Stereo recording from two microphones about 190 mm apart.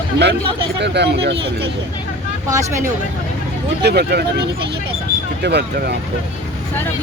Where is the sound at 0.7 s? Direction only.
65° right (ahead or behind).